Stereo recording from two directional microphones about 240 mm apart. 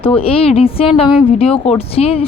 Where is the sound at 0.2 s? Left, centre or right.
Left.